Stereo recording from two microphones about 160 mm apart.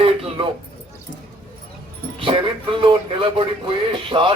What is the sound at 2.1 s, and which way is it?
Speech, 35° right (ahead or behind).